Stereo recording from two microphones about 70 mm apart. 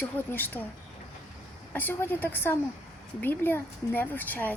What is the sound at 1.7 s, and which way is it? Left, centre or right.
A woman's voice, left.